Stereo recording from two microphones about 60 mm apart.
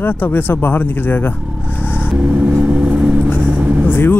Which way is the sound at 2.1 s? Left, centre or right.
Right.